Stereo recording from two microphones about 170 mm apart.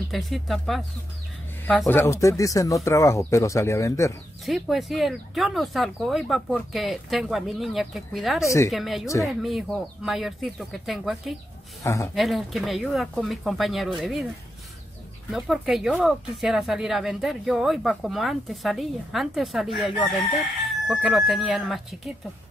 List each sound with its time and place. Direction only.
0.1 s speech: centre (ahead or behind); by 4.1 s 15° left (ahead or behind)
4.5 s speech: centre (ahead or behind)
11.8 s speech: 20° left (ahead or behind)
12.2 s speech: centre (ahead or behind)
15.3 s speech: centre (ahead or behind)